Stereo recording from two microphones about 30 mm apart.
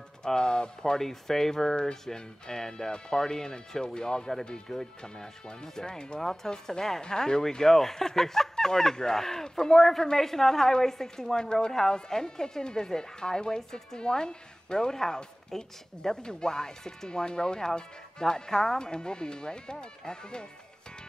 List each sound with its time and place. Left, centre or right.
0.3 s speech: left
0.9 s speech: centre; by 20.4 s left